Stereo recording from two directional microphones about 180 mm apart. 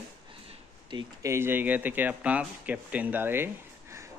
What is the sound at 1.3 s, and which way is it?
Speech, 10° right (ahead or behind).